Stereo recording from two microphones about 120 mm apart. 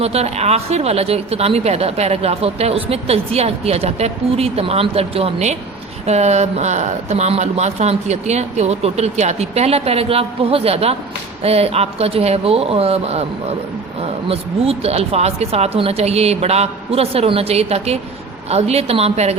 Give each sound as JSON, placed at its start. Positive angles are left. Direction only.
{"t": 0.0, "sound": "speech", "side_deg": -60}
{"t": 14.3, "sound": "speech", "side_deg": -55}